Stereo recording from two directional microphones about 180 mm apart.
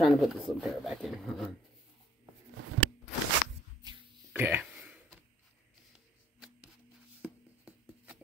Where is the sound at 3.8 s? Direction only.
25° right (ahead or behind).